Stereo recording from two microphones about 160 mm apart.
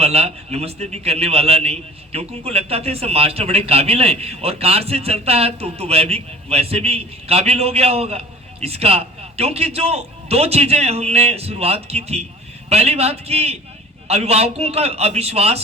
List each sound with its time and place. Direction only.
0.0 s a man's voice: 40° right (ahead or behind)